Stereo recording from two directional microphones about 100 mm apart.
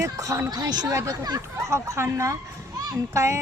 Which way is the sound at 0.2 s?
30° right (ahead or behind).